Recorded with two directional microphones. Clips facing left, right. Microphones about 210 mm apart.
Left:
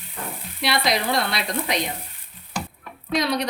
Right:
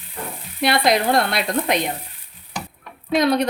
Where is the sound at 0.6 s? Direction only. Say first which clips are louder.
Right 5 dB; 55° right (ahead or behind).